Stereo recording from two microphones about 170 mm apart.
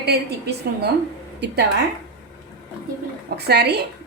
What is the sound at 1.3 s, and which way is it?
Speech, 80° right.